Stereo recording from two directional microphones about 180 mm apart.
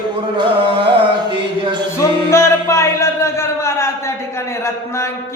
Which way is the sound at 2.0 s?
15° left (ahead or behind).